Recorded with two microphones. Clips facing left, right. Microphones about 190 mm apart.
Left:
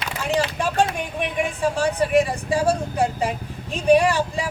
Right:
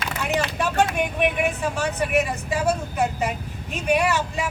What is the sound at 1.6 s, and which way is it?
Speech, 35° left (ahead or behind).